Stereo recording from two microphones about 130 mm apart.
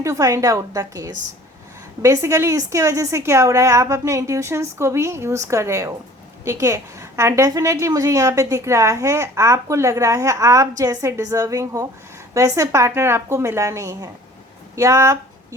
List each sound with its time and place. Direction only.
0.0 s a woman's voice: 25° right (ahead or behind)